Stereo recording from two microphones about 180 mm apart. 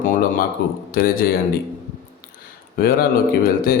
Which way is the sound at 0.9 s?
55° left (ahead or behind).